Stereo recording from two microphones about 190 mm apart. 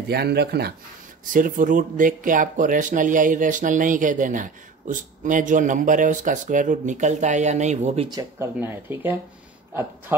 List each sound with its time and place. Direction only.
0.1 s speech: 60° right (ahead or behind)
1.3 s speech: 45° right (ahead or behind)
8.1 s speech: 15° right (ahead or behind)